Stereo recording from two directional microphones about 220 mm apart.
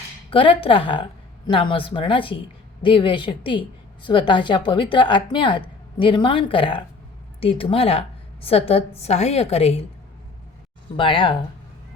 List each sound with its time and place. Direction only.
0.3 s a woman's voice: 25° left (ahead or behind)
10.9 s a woman's voice: 25° left (ahead or behind)